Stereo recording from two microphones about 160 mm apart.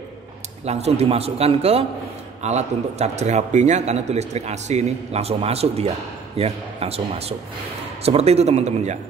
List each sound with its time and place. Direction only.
0.7 s a man's voice: 40° right (ahead or behind)